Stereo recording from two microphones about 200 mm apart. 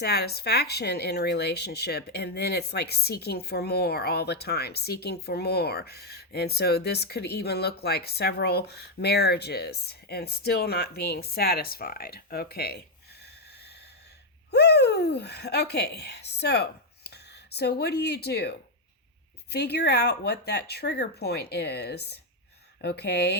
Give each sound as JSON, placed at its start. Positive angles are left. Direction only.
{"t": 0.0, "sound": "speech", "side_deg": 55}
{"t": 14.5, "sound": "speech", "side_deg": 55}